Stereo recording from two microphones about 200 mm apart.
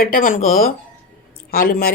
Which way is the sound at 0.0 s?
45° left (ahead or behind).